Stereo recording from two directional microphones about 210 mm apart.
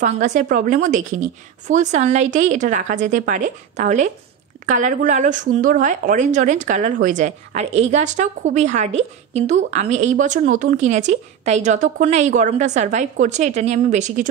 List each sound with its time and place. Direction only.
0.0 s speech: 35° right (ahead or behind)